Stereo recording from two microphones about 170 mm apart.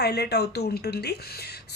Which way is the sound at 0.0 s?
75° left (ahead or behind).